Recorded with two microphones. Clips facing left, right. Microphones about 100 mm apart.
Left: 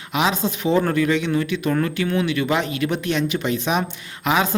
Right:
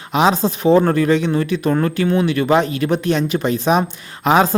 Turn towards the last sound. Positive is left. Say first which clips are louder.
# right 6 dB
turn(degrees=-40)  # may be behind; listen again after turning